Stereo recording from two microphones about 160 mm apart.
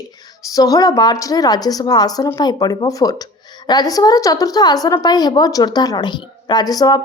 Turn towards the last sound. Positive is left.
turn(degrees=25)  # may be behind; listen again after turning